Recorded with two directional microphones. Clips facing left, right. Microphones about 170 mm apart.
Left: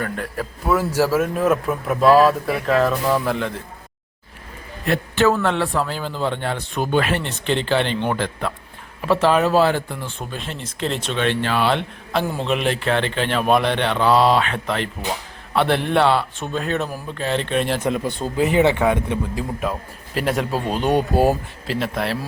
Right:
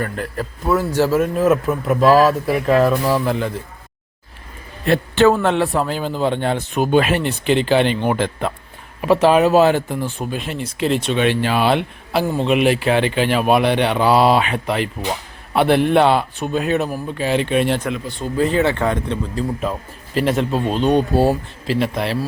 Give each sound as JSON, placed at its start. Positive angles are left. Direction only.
{"t": 0.0, "sound": "speech", "side_deg": 0}
{"t": 4.9, "sound": "a man's voice", "side_deg": -30}
{"t": 18.3, "sound": "a man's voice", "side_deg": 15}
{"t": 21.7, "sound": "speech", "side_deg": 0}